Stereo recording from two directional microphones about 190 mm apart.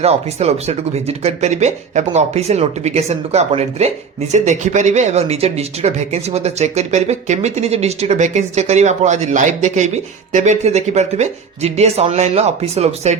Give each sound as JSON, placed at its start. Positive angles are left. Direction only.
{"t": 0.0, "sound": "speech", "side_deg": -35}